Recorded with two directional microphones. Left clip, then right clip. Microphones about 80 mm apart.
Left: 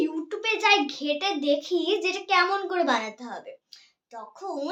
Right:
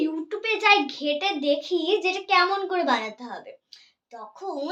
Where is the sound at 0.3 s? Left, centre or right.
Left.